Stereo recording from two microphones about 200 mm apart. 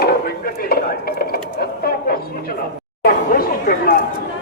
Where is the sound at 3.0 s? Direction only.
45° left (ahead or behind).